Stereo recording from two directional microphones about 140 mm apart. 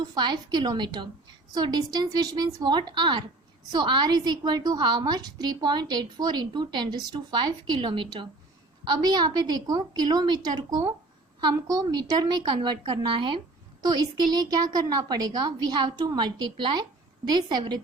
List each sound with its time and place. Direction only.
0.1 s a woman's voice: 30° right (ahead or behind)